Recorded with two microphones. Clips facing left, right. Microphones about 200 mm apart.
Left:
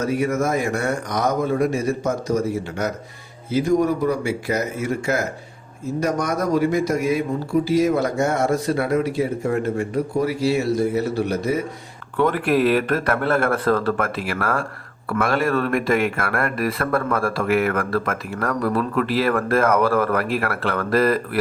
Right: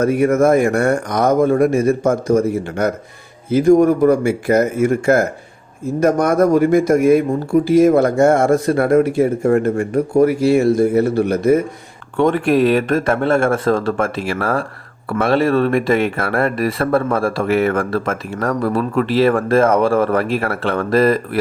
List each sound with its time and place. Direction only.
0.0 s speech: 55° right (ahead or behind)
12.1 s speech: 30° right (ahead or behind)